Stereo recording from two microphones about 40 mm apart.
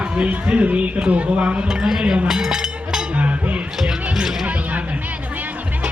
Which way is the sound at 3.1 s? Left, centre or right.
Right.